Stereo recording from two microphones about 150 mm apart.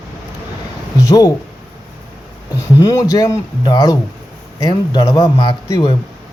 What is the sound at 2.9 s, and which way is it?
A man's voice, 20° left (ahead or behind).